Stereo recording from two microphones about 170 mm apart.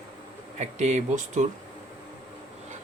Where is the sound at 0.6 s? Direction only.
40° right (ahead or behind).